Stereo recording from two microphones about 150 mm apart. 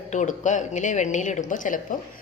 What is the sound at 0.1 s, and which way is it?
Dishes, 55° left (ahead or behind).